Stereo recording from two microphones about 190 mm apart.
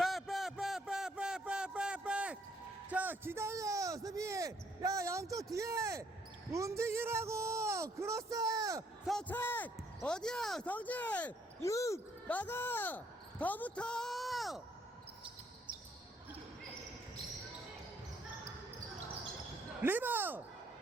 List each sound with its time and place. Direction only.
0.0 s a sound: centre (ahead or behind)
6.5 s a man's voice: 15° right (ahead or behind)
9.0 s speech: 5° left (ahead or behind)
19.8 s speech: 10° right (ahead or behind)